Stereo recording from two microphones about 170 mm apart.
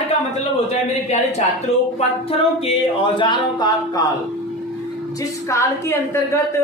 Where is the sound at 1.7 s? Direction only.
40° left (ahead or behind).